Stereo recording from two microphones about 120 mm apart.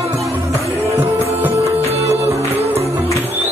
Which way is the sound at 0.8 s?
55° right (ahead or behind).